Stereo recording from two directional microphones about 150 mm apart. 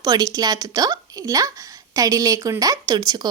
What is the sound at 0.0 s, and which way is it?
Speech, 25° right (ahead or behind).